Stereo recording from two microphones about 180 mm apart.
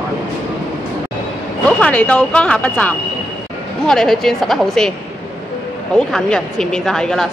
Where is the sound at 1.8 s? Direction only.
10° left (ahead or behind).